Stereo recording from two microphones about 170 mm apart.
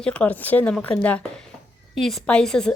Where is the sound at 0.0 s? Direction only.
5° left (ahead or behind).